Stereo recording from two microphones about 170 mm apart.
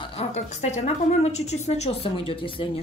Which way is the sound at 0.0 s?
35° left (ahead or behind).